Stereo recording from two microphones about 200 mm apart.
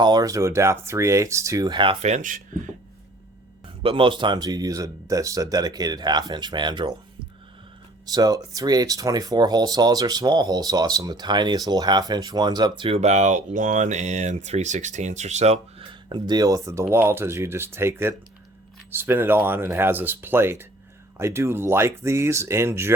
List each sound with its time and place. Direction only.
0.0 s speech: 20° right (ahead or behind); by 2.6 s 40° right (ahead or behind)
3.8 s speech: 25° right (ahead or behind)
8.0 s speech: 20° right (ahead or behind)